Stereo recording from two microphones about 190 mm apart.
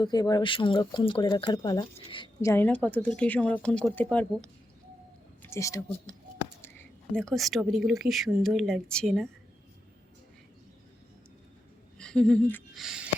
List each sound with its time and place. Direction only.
0.0 s speech: 20° left (ahead or behind)
7.2 s speech: centre (ahead or behind)
11.9 s speech: 5° left (ahead or behind)